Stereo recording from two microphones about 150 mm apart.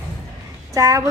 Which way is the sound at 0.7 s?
20° right (ahead or behind).